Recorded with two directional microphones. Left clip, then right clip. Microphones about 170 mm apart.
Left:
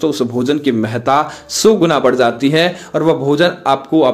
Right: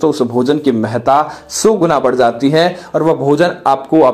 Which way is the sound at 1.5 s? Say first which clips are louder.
Left 1 dB; 35° left (ahead or behind).